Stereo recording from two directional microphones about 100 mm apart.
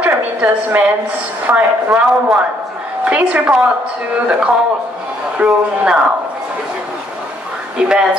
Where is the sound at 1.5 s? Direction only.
15° right (ahead or behind).